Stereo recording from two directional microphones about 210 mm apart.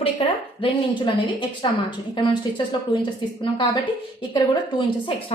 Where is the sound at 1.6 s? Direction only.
25° left (ahead or behind).